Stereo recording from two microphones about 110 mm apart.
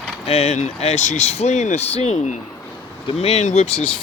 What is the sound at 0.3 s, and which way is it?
Speech, 70° left (ahead or behind).